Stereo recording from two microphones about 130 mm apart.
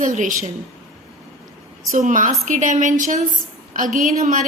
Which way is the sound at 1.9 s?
85° right.